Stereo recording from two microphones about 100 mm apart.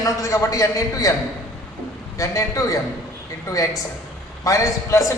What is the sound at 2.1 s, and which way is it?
Speech, 35° left (ahead or behind).